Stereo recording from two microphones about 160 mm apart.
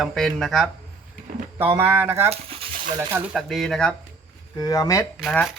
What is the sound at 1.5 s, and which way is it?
Speech, 15° right (ahead or behind).